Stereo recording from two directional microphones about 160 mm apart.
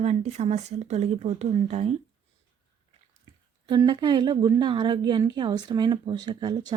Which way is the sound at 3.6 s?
30° right (ahead or behind).